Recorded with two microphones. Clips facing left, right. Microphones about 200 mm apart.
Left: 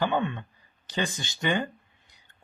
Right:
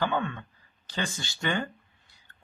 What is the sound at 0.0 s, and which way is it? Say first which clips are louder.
Speech: left 2 dB; 20° left (ahead or behind).